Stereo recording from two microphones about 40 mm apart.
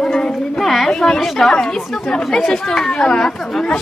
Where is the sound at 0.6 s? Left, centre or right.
Centre.